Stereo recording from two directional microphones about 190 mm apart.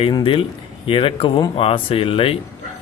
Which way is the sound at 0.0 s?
30° left (ahead or behind).